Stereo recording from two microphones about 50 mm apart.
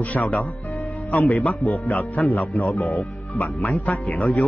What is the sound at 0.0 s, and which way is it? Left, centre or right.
A man's voice, left.